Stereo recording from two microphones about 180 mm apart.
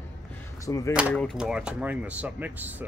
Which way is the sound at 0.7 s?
20° left (ahead or behind).